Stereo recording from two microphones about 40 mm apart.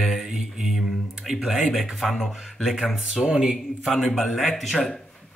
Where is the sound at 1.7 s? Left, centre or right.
Centre.